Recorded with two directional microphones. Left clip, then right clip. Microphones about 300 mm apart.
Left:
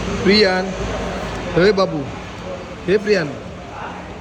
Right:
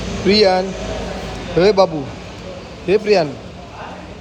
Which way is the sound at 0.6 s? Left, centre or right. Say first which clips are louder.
Even; centre.